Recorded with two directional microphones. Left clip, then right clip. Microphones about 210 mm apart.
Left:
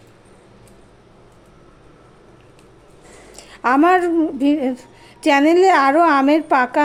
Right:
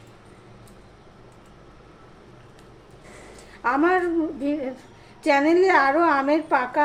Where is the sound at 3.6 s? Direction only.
50° left (ahead or behind).